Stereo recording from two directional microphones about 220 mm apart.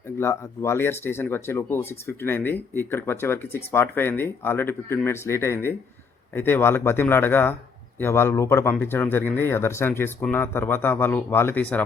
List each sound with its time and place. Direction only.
0.2 s speech: 10° left (ahead or behind)